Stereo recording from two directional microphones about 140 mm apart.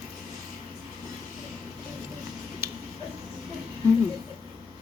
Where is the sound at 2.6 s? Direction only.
15° right (ahead or behind).